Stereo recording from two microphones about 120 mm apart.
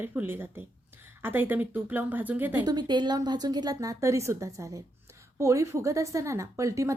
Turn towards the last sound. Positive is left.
turn(degrees=-25)  # may be behind; listen again after turning